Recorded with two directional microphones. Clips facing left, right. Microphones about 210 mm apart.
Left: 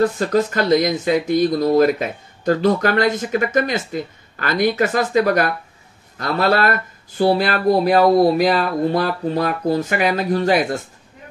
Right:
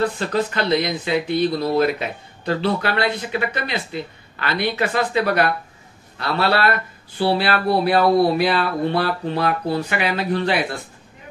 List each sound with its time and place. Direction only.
0.0 s speech: 40° left (ahead or behind)